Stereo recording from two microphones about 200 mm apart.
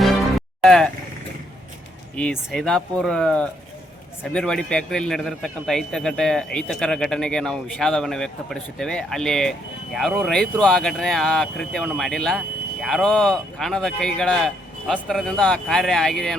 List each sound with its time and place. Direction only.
0.0 s music: centre (ahead or behind)
2.1 s a man's voice: 5° left (ahead or behind)